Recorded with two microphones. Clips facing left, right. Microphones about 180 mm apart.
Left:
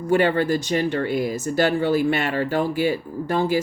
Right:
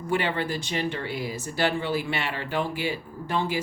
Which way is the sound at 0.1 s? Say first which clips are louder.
Left 8 dB; 45° left (ahead or behind).